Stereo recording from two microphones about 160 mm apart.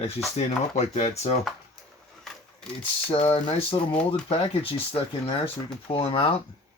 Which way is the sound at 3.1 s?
35° left (ahead or behind).